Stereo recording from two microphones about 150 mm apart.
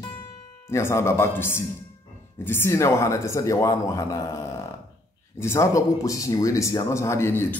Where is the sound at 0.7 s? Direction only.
20° left (ahead or behind).